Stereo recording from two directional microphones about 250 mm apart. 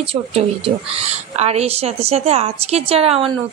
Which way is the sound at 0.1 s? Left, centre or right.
Right.